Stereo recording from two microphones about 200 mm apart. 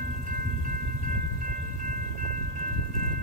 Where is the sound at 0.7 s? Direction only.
40° right (ahead or behind).